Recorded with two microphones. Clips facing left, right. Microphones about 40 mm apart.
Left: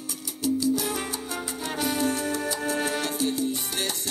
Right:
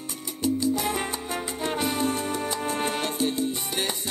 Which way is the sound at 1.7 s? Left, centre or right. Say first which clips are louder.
Even; centre.